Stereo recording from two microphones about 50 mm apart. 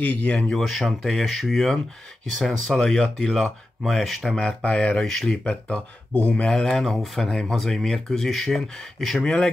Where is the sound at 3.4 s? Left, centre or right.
Centre.